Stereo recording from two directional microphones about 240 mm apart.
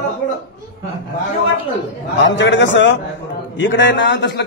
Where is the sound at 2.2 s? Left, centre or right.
Left.